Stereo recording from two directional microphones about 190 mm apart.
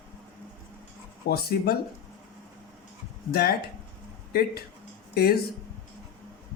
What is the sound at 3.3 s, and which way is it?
Speech, 55° left (ahead or behind).